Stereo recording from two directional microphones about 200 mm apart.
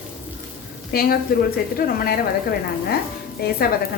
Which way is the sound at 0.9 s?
50° left (ahead or behind).